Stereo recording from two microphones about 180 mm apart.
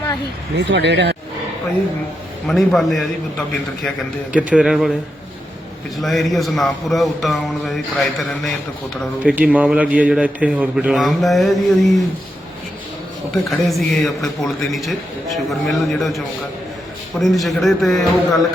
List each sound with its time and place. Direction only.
0.5 s speech: 75° right (ahead or behind)
2.5 s a man's voice: centre (ahead or behind)
6.0 s a man's voice: centre (ahead or behind)
13.5 s a man's voice: centre (ahead or behind)